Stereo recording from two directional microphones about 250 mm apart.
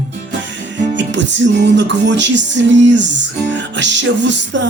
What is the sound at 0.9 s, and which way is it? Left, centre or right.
Music, right.